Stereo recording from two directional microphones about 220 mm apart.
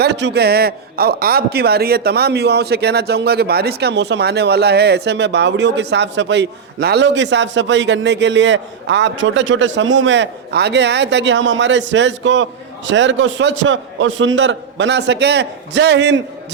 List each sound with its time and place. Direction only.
0.0 s speech: 50° right (ahead or behind)